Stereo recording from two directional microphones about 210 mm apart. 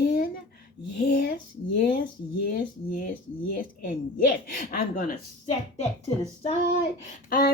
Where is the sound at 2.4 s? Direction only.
45° left (ahead or behind).